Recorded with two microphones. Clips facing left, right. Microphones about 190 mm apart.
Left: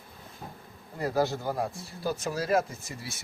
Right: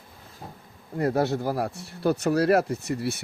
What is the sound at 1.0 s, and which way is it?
Speech, 65° right (ahead or behind).